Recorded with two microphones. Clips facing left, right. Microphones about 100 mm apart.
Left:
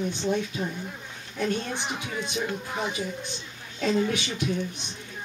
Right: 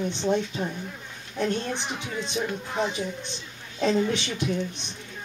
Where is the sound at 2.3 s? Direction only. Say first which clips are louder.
Right 4 dB; 25° right (ahead or behind).